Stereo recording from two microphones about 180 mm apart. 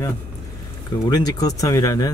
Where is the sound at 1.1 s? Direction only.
20° left (ahead or behind).